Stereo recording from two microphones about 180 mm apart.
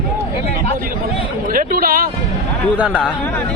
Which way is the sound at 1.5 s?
55° right (ahead or behind).